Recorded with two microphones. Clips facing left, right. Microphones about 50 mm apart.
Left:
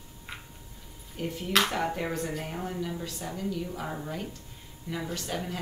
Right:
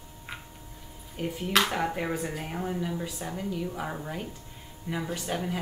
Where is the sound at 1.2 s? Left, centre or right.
Centre.